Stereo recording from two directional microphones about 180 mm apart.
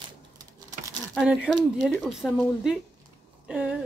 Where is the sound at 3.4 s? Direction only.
5° right (ahead or behind).